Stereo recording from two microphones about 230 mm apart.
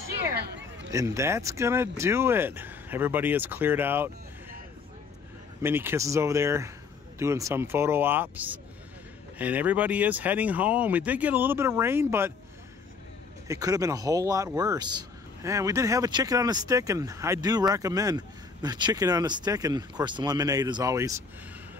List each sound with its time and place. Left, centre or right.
0.4 s a sound: right
0.9 s a man's voice: centre
5.6 s a man's voice: centre
13.5 s a man's voice: centre